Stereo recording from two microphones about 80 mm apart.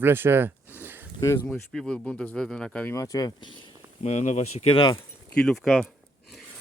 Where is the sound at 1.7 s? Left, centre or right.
Centre.